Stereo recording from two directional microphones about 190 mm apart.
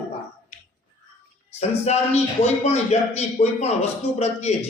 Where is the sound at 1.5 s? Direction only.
35° left (ahead or behind).